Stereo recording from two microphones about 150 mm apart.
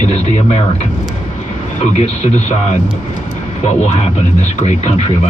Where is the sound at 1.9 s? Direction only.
45° left (ahead or behind).